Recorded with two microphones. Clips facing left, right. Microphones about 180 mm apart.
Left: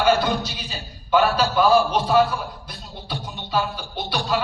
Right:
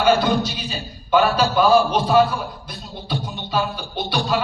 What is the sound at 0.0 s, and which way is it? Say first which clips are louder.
A man's voice: right 2 dB; 20° right (ahead or behind).